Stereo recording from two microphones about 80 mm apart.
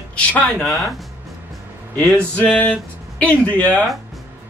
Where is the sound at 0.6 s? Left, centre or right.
Centre.